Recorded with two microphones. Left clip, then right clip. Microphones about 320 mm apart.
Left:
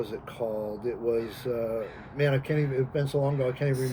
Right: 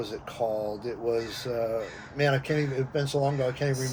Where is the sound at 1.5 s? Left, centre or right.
Right.